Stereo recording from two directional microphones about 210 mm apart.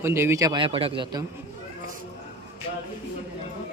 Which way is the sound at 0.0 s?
10° right (ahead or behind).